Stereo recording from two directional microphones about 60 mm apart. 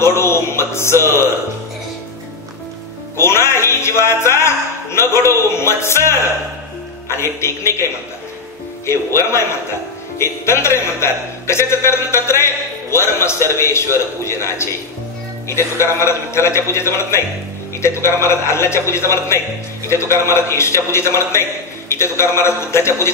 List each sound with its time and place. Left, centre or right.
0.0 s a man's voice: left
3.2 s a man's voice: left
8.8 s a man's voice: left